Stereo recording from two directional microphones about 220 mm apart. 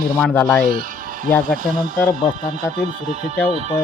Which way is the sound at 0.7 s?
40° right (ahead or behind).